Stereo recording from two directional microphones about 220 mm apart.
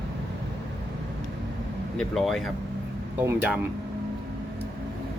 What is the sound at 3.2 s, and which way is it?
Speech, 10° right (ahead or behind).